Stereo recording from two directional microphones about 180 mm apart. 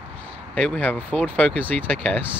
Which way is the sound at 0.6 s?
5° left (ahead or behind).